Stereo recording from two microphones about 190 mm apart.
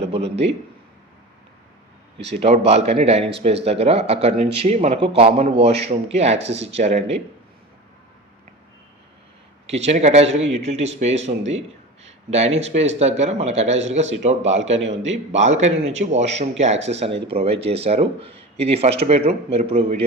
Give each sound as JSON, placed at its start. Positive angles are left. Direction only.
{"t": 0.2, "sound": "a man's voice", "side_deg": -65}
{"t": 2.4, "sound": "a man's voice", "side_deg": -35}
{"t": 9.6, "sound": "a man's voice", "side_deg": -35}
{"t": 14.8, "sound": "a man's voice", "side_deg": -75}
{"t": 15.3, "sound": "a man's voice", "side_deg": -40}